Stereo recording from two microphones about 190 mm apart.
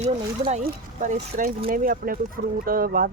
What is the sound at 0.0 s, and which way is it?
Speech, 35° right (ahead or behind).